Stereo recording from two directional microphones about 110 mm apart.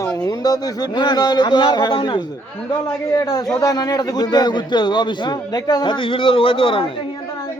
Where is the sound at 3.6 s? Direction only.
35° left (ahead or behind).